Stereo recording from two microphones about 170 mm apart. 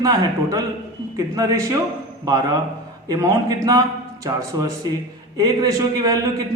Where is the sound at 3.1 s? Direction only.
20° right (ahead or behind).